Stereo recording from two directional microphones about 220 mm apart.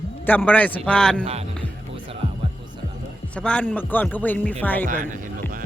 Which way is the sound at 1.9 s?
25° right (ahead or behind).